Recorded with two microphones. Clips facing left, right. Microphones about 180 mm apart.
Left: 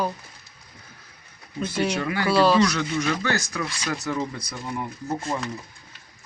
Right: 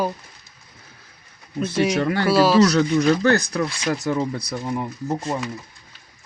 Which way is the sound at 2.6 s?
40° right (ahead or behind).